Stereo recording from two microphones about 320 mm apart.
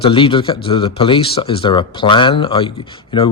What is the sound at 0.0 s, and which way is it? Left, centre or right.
Speech, centre.